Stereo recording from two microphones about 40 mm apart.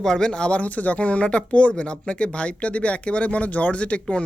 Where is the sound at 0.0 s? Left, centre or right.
Centre.